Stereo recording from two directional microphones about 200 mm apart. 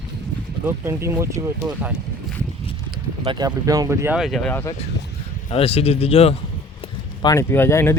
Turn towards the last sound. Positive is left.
turn(degrees=10)  # may be behind; listen again after turning